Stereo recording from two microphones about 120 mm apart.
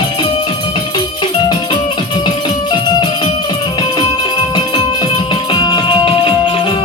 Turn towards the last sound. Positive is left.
turn(degrees=40)  # may be behind; listen again after turning